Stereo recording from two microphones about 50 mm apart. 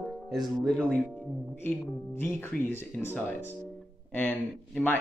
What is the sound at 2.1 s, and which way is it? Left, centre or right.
Speech, left.